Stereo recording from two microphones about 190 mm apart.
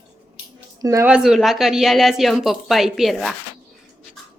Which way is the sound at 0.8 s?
15° right (ahead or behind).